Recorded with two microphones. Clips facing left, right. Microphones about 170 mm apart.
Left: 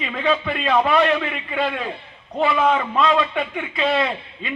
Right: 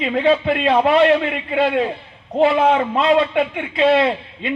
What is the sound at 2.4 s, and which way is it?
Speech, 40° right (ahead or behind).